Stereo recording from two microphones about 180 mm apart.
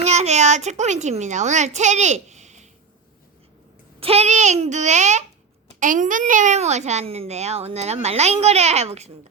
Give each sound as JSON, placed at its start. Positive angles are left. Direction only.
{"t": 0.0, "sound": "a child's voice", "side_deg": -40}
{"t": 4.0, "sound": "a child's voice", "side_deg": -35}